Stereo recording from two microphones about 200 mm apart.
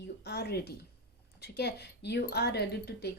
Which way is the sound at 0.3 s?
55° left (ahead or behind).